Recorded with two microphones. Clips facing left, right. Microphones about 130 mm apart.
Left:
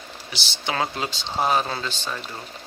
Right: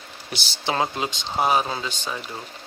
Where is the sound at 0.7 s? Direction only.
20° right (ahead or behind).